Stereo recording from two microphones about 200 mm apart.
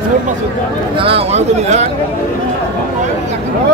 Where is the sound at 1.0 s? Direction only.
30° right (ahead or behind).